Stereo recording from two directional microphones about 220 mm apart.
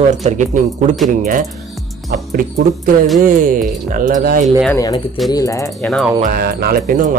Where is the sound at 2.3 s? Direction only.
40° right (ahead or behind).